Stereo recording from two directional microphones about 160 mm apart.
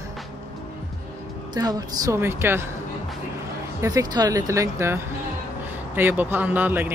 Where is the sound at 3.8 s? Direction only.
25° right (ahead or behind).